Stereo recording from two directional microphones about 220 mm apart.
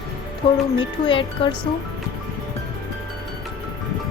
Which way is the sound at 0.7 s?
20° left (ahead or behind).